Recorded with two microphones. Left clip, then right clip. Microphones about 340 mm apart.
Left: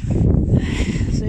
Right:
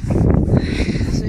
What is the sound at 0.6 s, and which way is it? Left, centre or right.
Speech, left.